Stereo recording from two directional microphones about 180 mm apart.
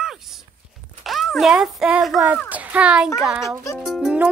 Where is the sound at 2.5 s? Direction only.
5° right (ahead or behind).